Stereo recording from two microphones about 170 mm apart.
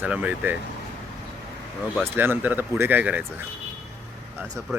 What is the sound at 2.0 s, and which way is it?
Speech, 10° right (ahead or behind).